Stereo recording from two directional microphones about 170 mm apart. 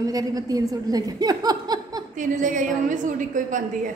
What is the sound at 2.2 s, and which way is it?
A woman's voice, 50° right (ahead or behind).